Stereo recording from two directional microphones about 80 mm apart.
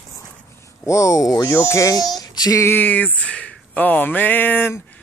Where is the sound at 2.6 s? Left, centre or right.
Left.